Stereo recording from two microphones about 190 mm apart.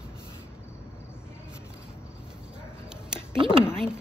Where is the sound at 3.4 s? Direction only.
30° right (ahead or behind).